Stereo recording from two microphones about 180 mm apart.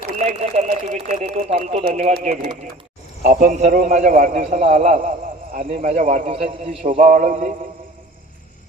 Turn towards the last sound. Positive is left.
turn(degrees=-45)  # may be behind; listen again after turning